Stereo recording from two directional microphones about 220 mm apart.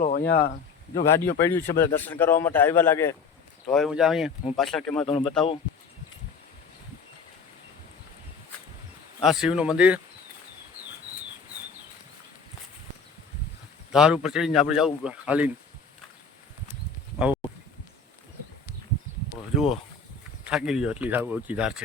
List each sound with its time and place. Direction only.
0.0 s speech: 45° left (ahead or behind)
1.0 s a man's voice: 10° left (ahead or behind)
3.7 s speech: centre (ahead or behind)
5.0 s speech: 25° left (ahead or behind)
9.2 s speech: centre (ahead or behind)
13.9 s speech: 5° right (ahead or behind)
17.2 s speech: 5° right (ahead or behind)
20.4 s speech: 5° right (ahead or behind)